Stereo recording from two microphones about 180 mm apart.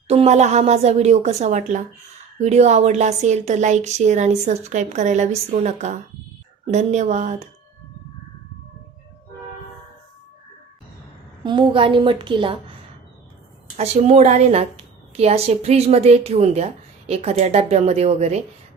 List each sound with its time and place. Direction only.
0.1 s a woman's voice: 35° right (ahead or behind)
11.4 s a woman's voice: 25° right (ahead or behind)
13.7 s a woman's voice: 35° right (ahead or behind)